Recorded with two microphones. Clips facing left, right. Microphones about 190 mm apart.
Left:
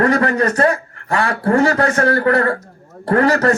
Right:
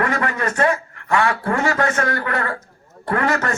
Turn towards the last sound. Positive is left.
turn(degrees=35)  # may be behind; listen again after turning